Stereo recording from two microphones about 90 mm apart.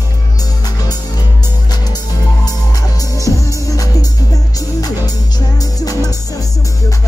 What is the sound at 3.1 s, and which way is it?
Music, 40° left (ahead or behind).